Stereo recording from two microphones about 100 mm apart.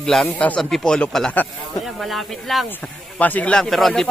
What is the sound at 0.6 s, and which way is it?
Speech, 5° left (ahead or behind).